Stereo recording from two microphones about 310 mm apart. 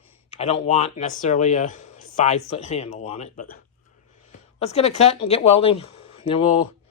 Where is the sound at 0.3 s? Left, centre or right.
Centre.